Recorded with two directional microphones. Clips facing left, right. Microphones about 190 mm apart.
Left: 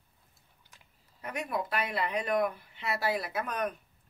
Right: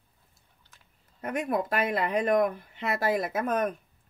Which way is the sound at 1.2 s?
50° right (ahead or behind).